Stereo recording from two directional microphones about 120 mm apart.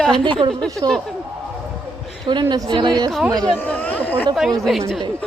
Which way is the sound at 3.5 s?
10° left (ahead or behind).